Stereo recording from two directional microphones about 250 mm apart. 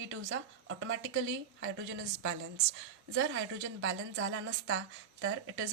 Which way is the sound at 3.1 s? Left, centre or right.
Right.